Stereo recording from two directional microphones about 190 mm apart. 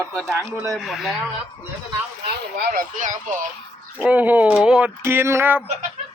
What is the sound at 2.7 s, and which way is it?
Speech, 45° right (ahead or behind).